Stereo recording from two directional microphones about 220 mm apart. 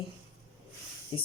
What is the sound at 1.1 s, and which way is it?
Speech, 25° left (ahead or behind).